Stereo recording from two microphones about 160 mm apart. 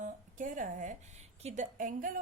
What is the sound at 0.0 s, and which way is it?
A woman's voice, 55° right (ahead or behind).